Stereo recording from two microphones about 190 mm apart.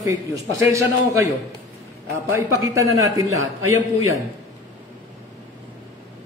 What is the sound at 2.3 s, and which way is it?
Speech, 15° right (ahead or behind).